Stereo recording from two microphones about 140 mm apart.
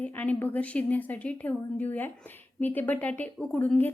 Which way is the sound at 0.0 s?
10° left (ahead or behind).